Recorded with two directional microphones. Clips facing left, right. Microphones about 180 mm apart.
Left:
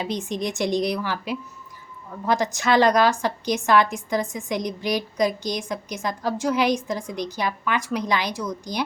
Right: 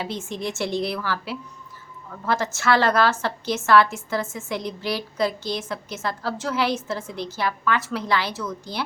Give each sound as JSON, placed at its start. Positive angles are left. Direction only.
{"t": 0.0, "sound": "a woman's voice", "side_deg": 15}